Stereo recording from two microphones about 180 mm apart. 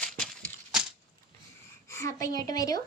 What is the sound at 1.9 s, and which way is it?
Speech, 15° left (ahead or behind).